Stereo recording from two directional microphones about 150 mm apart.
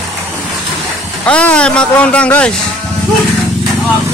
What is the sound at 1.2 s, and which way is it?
Speech, 10° left (ahead or behind).